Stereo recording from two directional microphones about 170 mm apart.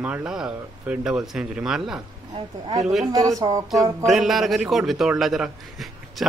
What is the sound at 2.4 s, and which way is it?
A woman's voice, 25° right (ahead or behind).